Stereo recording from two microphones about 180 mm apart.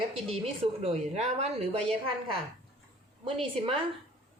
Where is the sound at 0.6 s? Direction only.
35° right (ahead or behind).